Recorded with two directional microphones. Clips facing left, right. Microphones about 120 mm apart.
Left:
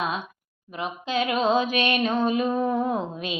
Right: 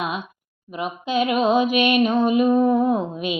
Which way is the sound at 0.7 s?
15° right (ahead or behind).